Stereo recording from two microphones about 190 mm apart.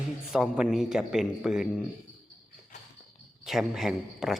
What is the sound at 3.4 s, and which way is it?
Speech, centre (ahead or behind).